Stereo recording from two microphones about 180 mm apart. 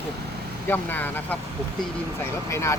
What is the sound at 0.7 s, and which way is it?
Speech, 10° left (ahead or behind).